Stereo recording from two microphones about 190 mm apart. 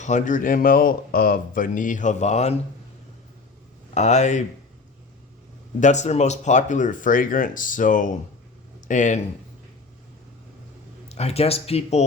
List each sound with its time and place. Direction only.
0.0 s speech: 40° left (ahead or behind)
3.9 s speech: 35° left (ahead or behind)
5.8 s speech: 40° left (ahead or behind)
11.1 s speech: 35° left (ahead or behind)